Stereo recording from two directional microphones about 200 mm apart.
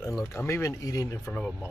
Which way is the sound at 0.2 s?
10° left (ahead or behind).